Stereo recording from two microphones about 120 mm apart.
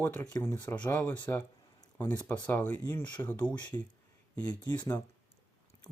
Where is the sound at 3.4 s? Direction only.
40° left (ahead or behind).